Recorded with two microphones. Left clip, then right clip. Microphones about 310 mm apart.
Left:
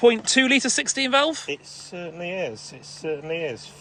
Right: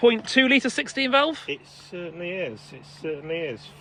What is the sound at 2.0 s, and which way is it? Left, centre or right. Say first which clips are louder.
Speech: left 2 dB; left.